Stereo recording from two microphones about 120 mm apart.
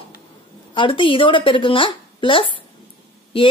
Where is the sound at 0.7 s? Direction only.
45° left (ahead or behind).